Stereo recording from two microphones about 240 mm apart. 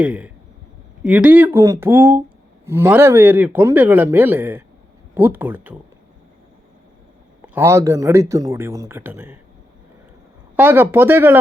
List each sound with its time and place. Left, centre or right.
0.0 s speech: centre
7.5 s speech: centre
10.6 s speech: centre